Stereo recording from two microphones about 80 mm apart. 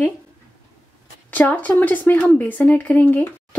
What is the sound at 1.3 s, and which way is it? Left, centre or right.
Speech, left.